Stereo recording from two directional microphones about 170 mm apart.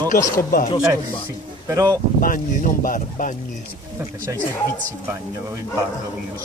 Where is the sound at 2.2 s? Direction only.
55° left (ahead or behind).